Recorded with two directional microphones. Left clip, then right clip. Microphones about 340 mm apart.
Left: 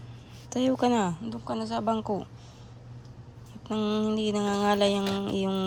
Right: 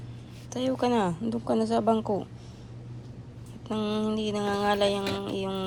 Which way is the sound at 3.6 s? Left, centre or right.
Centre.